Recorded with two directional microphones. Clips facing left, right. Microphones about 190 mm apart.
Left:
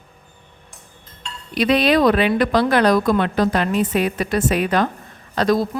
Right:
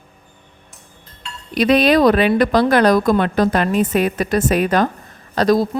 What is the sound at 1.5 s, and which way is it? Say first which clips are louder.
A woman's voice: right 3 dB; 45° right (ahead or behind).